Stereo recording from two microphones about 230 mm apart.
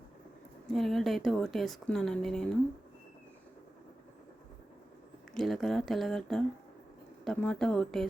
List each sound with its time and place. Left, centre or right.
0.7 s speech: centre
5.3 s speech: centre